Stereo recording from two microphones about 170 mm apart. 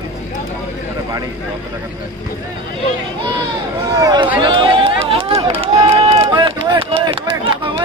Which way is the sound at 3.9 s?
20° right (ahead or behind).